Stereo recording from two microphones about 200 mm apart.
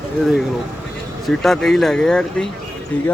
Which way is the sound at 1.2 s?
Centre (ahead or behind).